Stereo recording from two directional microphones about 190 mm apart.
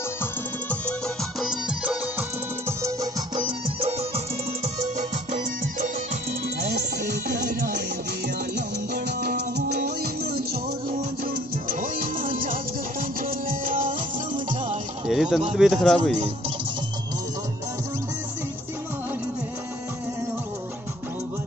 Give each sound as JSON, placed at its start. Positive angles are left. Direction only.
{"t": 0.2, "sound": "music", "side_deg": 5}
{"t": 2.8, "sound": "music", "side_deg": -20}
{"t": 4.7, "sound": "music", "side_deg": -40}
{"t": 7.4, "sound": "music", "side_deg": -55}
{"t": 11.6, "sound": "music", "side_deg": -45}
{"t": 15.0, "sound": "speech", "side_deg": 0}